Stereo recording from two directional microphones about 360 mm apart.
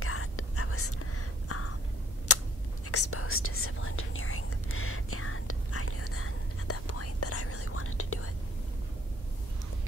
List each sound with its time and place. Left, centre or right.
0.0 s whispering: left
2.3 s a sound: left
2.9 s whispering: left